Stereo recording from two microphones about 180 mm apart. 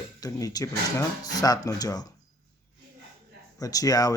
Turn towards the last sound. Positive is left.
turn(degrees=20)  # may be behind; listen again after turning